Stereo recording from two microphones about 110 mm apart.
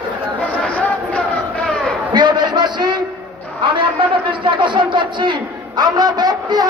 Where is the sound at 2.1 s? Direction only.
40° right (ahead or behind).